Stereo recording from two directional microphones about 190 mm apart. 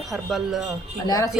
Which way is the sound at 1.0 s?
20° left (ahead or behind).